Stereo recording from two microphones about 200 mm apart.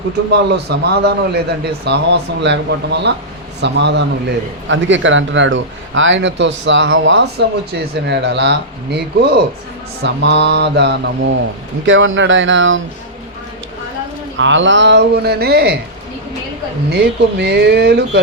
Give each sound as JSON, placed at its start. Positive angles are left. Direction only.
{"t": 0.3, "sound": "a man's voice", "side_deg": -55}
{"t": 11.9, "sound": "speech", "side_deg": -75}
{"t": 14.3, "sound": "a man's voice", "side_deg": -70}
{"t": 16.9, "sound": "speech", "side_deg": -50}